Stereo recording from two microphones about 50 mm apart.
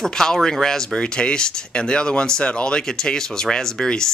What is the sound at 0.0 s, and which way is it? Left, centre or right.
Speech, centre.